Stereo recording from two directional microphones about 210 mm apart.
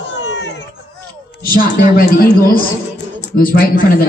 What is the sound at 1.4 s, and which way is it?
A woman's voice, 45° left (ahead or behind).